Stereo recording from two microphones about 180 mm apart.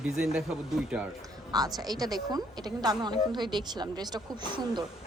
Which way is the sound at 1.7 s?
20° right (ahead or behind).